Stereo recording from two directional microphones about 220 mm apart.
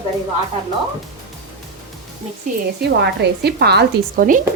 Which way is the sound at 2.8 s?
50° right (ahead or behind).